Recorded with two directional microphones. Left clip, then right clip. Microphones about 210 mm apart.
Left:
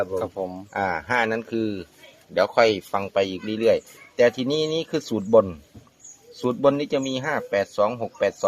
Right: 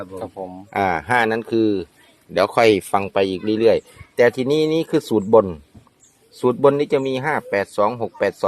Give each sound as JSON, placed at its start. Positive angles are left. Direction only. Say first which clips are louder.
{"t": 0.2, "sound": "speech", "louder": "left 2 dB", "side_deg": 5}
{"t": 0.7, "sound": "speech", "louder": "right 6 dB", "side_deg": -55}